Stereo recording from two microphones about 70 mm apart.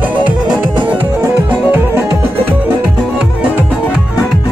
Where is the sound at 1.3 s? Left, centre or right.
Right.